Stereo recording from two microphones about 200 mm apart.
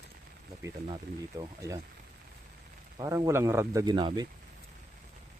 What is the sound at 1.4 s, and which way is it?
Speech, 15° right (ahead or behind).